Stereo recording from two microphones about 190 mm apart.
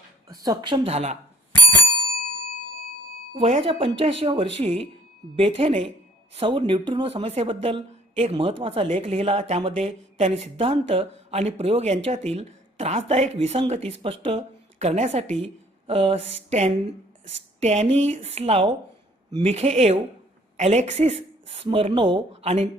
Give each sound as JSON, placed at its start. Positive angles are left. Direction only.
{"t": 0.3, "sound": "speech", "side_deg": -20}
{"t": 3.3, "sound": "speech", "side_deg": -30}